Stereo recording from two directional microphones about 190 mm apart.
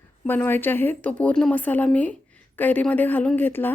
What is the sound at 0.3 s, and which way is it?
Speech, 10° left (ahead or behind).